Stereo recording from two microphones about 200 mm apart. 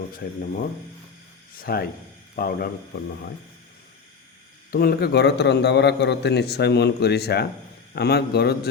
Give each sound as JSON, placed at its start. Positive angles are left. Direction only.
{"t": 0.2, "sound": "speech", "side_deg": 55}
{"t": 1.5, "sound": "speech", "side_deg": 50}
{"t": 4.7, "sound": "a man's voice", "side_deg": 50}